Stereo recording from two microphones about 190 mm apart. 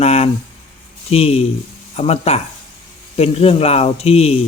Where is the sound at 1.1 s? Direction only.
30° left (ahead or behind).